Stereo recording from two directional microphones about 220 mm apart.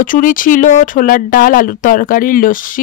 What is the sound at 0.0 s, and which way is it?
Speech, 40° left (ahead or behind).